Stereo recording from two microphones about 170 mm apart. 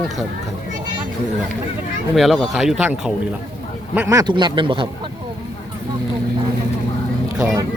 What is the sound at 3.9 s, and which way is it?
Speech, 20° right (ahead or behind).